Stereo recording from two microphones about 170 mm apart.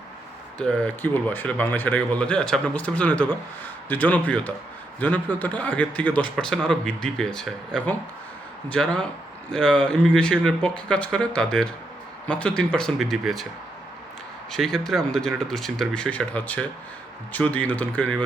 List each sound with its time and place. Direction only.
0.6 s speech: 5° left (ahead or behind)
14.5 s speech: centre (ahead or behind)